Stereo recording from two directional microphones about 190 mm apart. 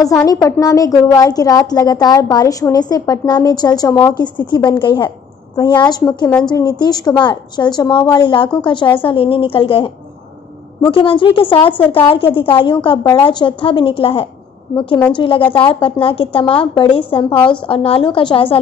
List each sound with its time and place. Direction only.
0.0 s a woman's voice: 20° left (ahead or behind)